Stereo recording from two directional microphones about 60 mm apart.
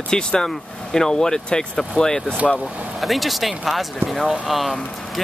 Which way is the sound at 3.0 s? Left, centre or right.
Centre.